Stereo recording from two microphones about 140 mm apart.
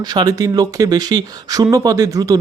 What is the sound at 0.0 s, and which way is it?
Speech, 30° right (ahead or behind).